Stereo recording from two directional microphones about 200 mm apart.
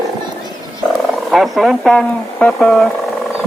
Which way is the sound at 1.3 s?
Centre (ahead or behind).